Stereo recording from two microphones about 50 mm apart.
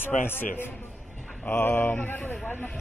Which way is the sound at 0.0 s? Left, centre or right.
Left.